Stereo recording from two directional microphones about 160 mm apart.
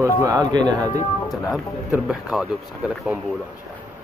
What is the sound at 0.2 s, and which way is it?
Speech, 25° right (ahead or behind).